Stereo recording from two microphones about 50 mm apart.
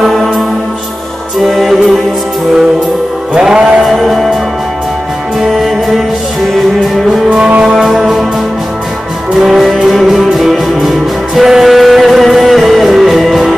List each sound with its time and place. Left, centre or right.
0.0 s music: centre
1.4 s music: centre
3.3 s music: centre
3.8 s music: centre
5.4 s music: centre
7.2 s music: right
7.7 s music: centre
9.3 s music: centre